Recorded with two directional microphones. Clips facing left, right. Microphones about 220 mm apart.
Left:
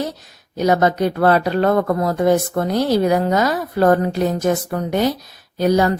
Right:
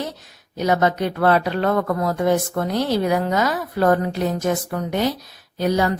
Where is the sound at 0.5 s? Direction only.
40° left (ahead or behind).